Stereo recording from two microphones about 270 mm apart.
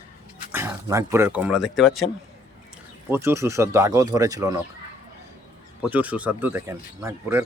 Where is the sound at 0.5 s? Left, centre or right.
Centre.